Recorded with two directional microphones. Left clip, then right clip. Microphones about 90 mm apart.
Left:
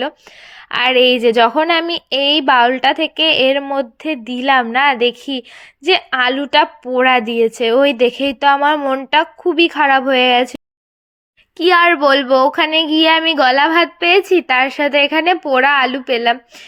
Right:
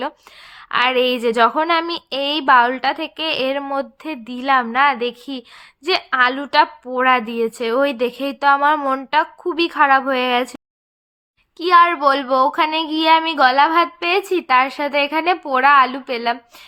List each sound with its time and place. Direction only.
0.7 s a woman's voice: 30° left (ahead or behind)
2.9 s child singing: 40° left (ahead or behind)
8.8 s speech: 15° left (ahead or behind)
9.0 s child singing: 30° left (ahead or behind)
11.5 s child singing: 60° left (ahead or behind); by 16.4 s 35° left (ahead or behind)